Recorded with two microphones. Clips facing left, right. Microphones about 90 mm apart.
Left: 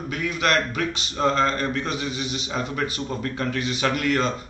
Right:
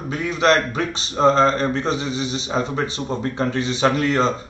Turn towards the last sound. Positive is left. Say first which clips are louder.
# right 4 dB
turn(degrees=-30)  # may be behind; listen again after turning